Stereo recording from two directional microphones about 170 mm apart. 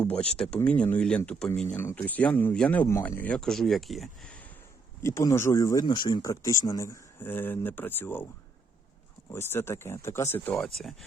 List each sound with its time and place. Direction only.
0.0 s speech: 10° left (ahead or behind)
5.0 s speech: 15° left (ahead or behind)
9.3 s speech: 15° left (ahead or behind)